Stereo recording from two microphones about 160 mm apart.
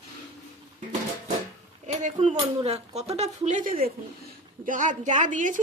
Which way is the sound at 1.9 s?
50° right (ahead or behind).